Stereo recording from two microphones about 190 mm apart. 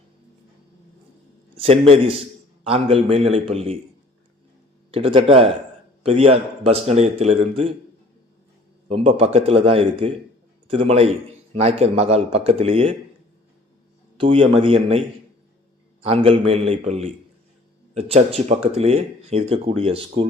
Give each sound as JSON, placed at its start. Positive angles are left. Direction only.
{"t": 1.5, "sound": "speech", "side_deg": -30}
{"t": 4.9, "sound": "speech", "side_deg": -30}
{"t": 8.9, "sound": "speech", "side_deg": -30}
{"t": 14.2, "sound": "a man's voice", "side_deg": -30}